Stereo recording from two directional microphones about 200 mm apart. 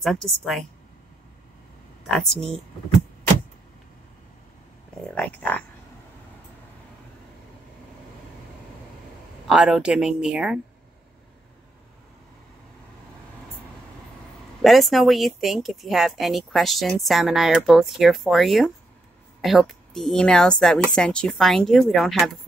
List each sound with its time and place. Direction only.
0.0 s speech: centre (ahead or behind)
2.0 s speech: centre (ahead or behind)
5.1 s speech: 5° left (ahead or behind)
9.5 s speech: 5° right (ahead or behind)
14.6 s speech: centre (ahead or behind)